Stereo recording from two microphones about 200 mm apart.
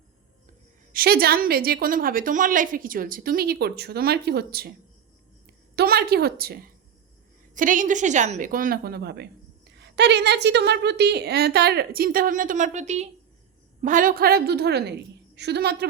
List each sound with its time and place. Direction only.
0.9 s a woman's voice: 50° right (ahead or behind)
5.7 s a sound: 50° right (ahead or behind)
7.5 s a woman's voice: 40° right (ahead or behind)